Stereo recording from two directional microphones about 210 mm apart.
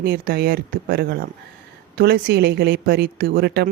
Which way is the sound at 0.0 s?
50° right (ahead or behind).